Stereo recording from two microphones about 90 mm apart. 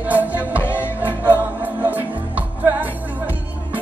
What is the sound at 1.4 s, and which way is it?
Music, 20° right (ahead or behind).